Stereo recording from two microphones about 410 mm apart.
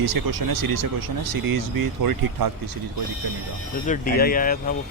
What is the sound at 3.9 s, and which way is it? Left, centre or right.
Speech, left.